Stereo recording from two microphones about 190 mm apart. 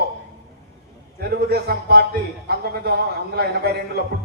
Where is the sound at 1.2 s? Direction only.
55° right (ahead or behind).